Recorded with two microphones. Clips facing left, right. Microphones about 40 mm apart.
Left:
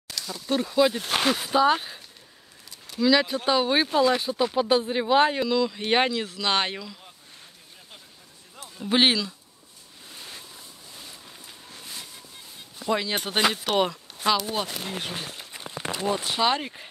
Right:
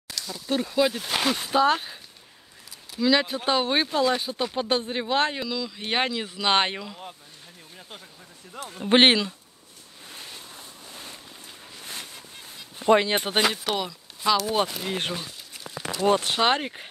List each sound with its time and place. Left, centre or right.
0.1 s speech: centre; by 7.0 s right
8.7 s speech: right
12.7 s speech: right
13.1 s speech: centre
13.7 s speech: left
14.9 s speech: right
15.1 s a sound: left
16.0 s speech: right
16.3 s speech: right